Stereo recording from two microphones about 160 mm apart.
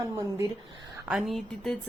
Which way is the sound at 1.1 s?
Centre (ahead or behind).